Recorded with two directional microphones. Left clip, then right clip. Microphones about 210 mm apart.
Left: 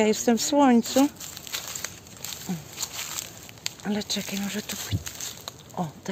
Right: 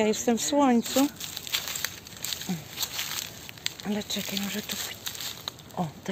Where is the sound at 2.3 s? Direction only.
5° left (ahead or behind).